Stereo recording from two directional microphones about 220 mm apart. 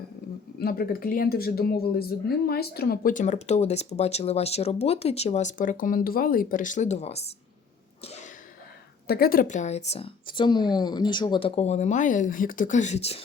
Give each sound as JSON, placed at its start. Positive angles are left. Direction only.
{"t": 0.6, "sound": "speech", "side_deg": 45}
{"t": 8.0, "sound": "sneeze", "side_deg": 30}
{"t": 9.0, "sound": "speech", "side_deg": 45}